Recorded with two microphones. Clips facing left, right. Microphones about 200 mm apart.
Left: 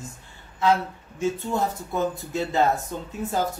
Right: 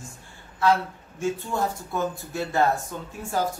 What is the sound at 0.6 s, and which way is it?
A man's voice, 20° left (ahead or behind).